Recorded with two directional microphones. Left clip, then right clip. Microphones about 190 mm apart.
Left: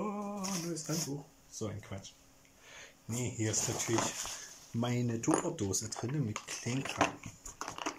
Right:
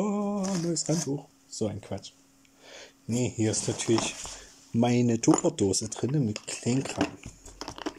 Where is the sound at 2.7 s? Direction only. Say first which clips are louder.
Right 9 dB; 60° right (ahead or behind).